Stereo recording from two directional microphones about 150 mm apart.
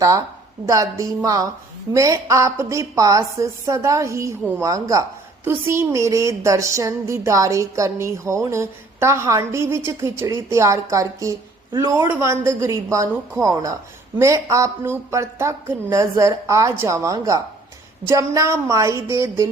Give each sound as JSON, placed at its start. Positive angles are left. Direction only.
{"t": 0.0, "sound": "a woman's voice", "side_deg": -20}